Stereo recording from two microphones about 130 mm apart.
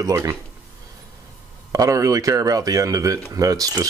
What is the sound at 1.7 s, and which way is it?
Speech, 25° right (ahead or behind).